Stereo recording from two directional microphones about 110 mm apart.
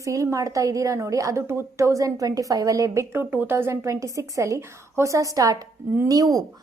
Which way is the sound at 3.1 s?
20° right (ahead or behind).